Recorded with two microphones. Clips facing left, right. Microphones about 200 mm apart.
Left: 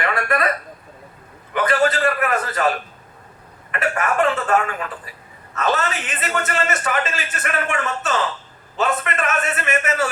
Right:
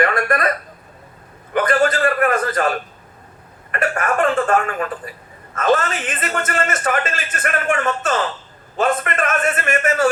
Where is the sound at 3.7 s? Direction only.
50° right (ahead or behind).